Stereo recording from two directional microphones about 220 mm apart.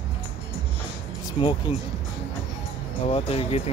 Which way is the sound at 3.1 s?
25° left (ahead or behind).